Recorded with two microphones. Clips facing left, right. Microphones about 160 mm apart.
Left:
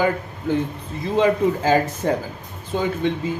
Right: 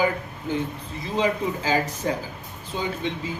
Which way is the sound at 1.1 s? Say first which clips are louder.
Left 6 dB; 50° left (ahead or behind).